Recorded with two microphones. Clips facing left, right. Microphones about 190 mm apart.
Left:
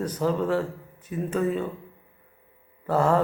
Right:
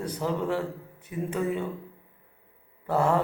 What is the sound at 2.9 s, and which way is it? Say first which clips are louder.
Speech: left 2 dB; 10° right (ahead or behind).